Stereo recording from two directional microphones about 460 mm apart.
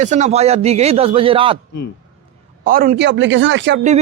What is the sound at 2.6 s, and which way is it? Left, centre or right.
Speech, centre.